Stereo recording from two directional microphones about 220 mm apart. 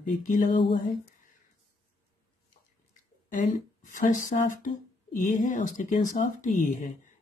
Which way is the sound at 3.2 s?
35° left (ahead or behind).